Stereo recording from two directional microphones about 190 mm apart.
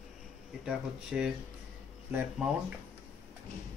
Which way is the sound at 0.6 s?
5° right (ahead or behind).